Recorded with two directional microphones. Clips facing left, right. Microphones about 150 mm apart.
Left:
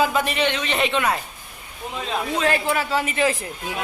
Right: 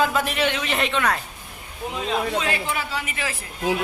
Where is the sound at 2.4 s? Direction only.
45° left (ahead or behind); by 3.3 s 30° left (ahead or behind).